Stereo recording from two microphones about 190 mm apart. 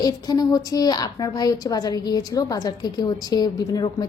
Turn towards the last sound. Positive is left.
turn(degrees=20)  # may be behind; listen again after turning